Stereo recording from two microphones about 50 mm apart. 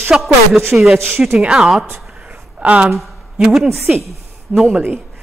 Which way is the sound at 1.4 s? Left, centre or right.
Centre.